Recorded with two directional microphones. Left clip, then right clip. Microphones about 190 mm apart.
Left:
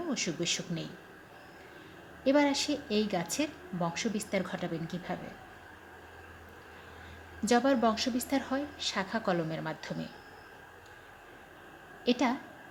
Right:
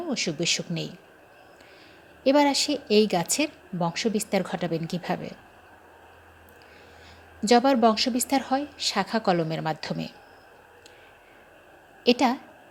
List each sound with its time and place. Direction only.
0.1 s a woman's voice: 30° right (ahead or behind)
2.2 s a woman's voice: 35° right (ahead or behind)
7.4 s a woman's voice: 30° right (ahead or behind)
12.0 s a woman's voice: 35° right (ahead or behind)